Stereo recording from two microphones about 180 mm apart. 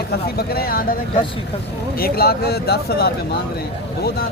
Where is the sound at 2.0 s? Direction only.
60° left (ahead or behind).